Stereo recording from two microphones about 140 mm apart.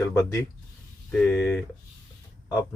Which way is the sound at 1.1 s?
10° left (ahead or behind).